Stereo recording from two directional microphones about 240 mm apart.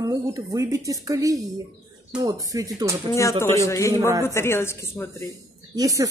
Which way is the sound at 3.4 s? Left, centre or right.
Centre.